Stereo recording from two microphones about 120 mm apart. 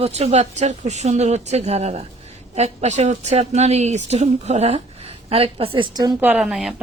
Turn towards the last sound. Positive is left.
turn(degrees=-5)  # may be behind; listen again after turning